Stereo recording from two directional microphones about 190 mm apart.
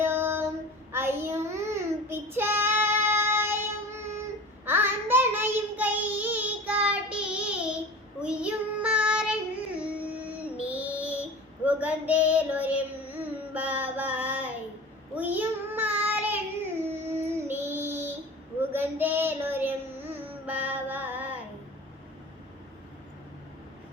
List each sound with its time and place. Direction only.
0.0 s female singing: 10° right (ahead or behind)
0.9 s child singing: 10° right (ahead or behind)